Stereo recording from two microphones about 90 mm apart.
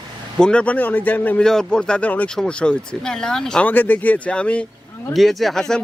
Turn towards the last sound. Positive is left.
turn(degrees=5)  # may be behind; listen again after turning